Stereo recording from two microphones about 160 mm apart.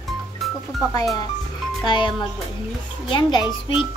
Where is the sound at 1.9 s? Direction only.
30° left (ahead or behind).